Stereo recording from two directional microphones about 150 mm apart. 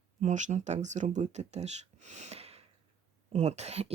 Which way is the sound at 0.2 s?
55° right (ahead or behind).